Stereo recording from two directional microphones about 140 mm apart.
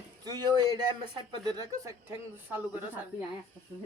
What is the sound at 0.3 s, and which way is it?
Speech, 30° right (ahead or behind).